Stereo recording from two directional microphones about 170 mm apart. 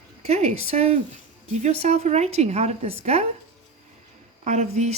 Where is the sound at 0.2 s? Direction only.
40° right (ahead or behind).